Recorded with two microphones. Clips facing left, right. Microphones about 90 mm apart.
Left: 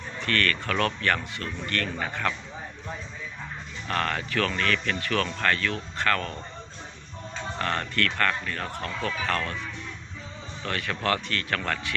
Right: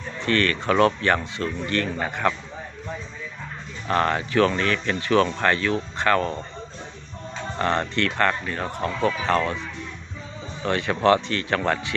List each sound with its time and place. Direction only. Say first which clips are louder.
0.2 s speech: right 4 dB; 20° right (ahead or behind)
3.8 s speech: right 6 dB; 25° right (ahead or behind)
7.6 s speech: right 5 dB; 25° right (ahead or behind)
10.6 s speech: right 8 dB; 20° right (ahead or behind)